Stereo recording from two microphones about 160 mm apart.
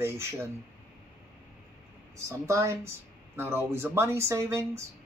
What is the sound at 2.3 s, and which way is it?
Speech, 20° right (ahead or behind).